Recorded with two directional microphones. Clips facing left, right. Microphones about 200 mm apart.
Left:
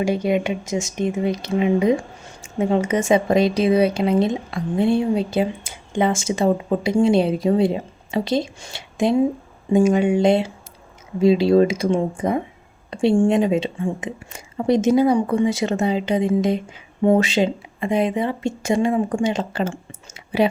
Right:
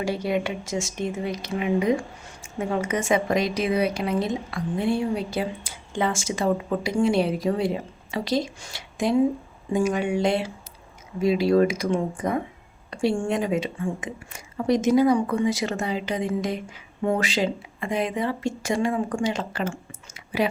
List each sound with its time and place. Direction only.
0.0 s speech: 20° left (ahead or behind)